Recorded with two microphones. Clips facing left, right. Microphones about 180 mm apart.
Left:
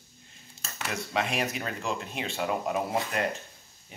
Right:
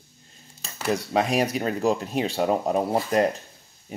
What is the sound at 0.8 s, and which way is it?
Speech, 35° right (ahead or behind).